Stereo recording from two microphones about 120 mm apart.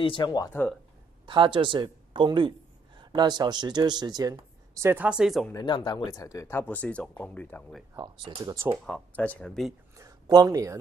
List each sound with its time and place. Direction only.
0.0 s speech: 45° left (ahead or behind)
0.5 s speech: 15° left (ahead or behind)
1.2 s speech: 45° right (ahead or behind)
4.7 s speech: 20° right (ahead or behind)
5.0 s speech: 5° right (ahead or behind)
5.5 s speech: 35° left (ahead or behind)
6.6 s speech: 15° left (ahead or behind)
7.9 s speech: 35° right (ahead or behind)
8.7 s speech: 5° left (ahead or behind)
9.9 s a sound: 30° right (ahead or behind)